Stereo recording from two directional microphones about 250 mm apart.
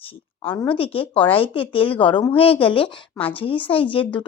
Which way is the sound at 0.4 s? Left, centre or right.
Centre.